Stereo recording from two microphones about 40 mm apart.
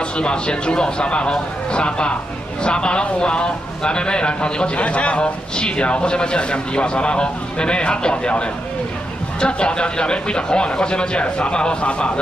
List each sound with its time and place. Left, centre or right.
0.2 s a man's voice: left